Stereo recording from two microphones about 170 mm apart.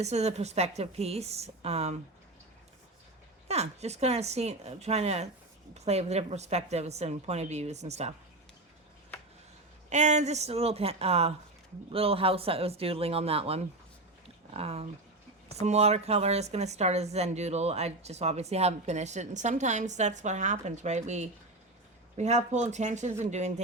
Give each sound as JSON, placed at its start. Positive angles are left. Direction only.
{"t": 0.0, "sound": "speech", "side_deg": -40}
{"t": 3.5, "sound": "speech", "side_deg": -40}
{"t": 9.9, "sound": "speech", "side_deg": -45}